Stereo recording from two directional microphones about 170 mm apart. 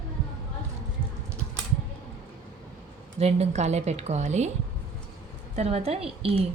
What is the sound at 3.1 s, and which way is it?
Speech, 40° right (ahead or behind).